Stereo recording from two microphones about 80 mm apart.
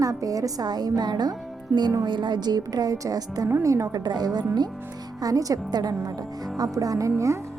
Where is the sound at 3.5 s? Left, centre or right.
Right.